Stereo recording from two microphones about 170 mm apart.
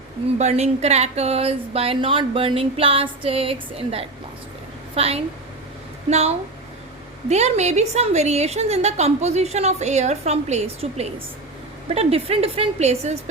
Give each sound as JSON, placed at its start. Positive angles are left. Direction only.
{"t": 0.3, "sound": "a woman's voice", "side_deg": -40}